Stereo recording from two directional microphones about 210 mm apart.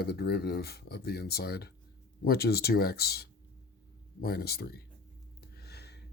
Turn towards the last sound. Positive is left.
turn(degrees=50)  # may be behind; listen again after turning